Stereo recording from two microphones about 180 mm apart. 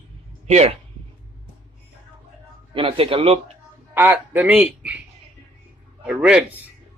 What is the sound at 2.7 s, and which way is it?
Speech, 30° right (ahead or behind).